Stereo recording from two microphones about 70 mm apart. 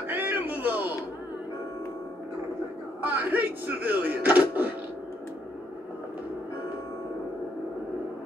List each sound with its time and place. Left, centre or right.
0.1 s music: right
3.0 s speech: right